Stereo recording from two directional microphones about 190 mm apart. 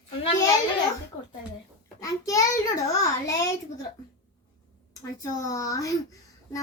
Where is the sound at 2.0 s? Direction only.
15° left (ahead or behind).